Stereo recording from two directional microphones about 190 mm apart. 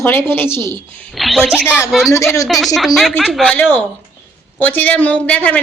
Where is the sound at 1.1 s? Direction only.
Centre (ahead or behind).